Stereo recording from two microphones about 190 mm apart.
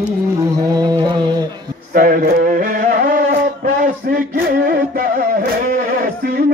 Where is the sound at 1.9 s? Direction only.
45° right (ahead or behind).